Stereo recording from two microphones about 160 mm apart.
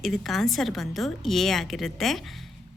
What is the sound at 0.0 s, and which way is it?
A woman's voice, centre (ahead or behind).